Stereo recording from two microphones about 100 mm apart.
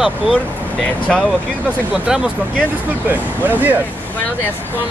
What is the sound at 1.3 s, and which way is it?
Speech, 10° right (ahead or behind).